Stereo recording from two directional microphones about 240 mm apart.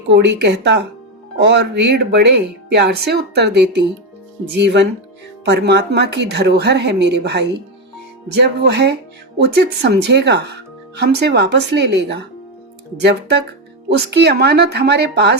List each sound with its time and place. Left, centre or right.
0.1 s speech: right